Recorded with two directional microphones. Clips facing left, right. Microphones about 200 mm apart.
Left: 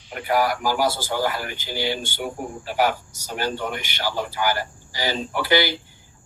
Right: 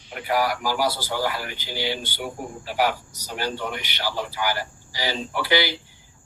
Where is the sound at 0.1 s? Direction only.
50° left (ahead or behind).